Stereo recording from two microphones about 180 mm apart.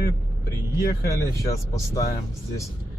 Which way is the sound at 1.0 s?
15° left (ahead or behind).